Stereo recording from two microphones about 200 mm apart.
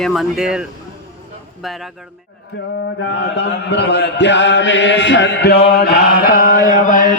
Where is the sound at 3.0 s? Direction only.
65° left (ahead or behind).